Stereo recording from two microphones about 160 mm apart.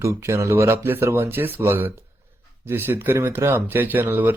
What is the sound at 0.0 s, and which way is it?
Speech, 20° right (ahead or behind).